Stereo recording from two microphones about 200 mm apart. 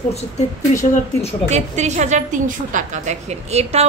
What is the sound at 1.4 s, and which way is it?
A woman's voice, 35° right (ahead or behind).